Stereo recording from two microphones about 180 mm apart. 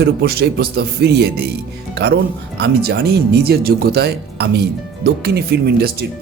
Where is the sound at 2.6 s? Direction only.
65° right (ahead or behind).